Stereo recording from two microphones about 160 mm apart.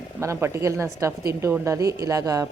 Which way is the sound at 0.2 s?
15° right (ahead or behind).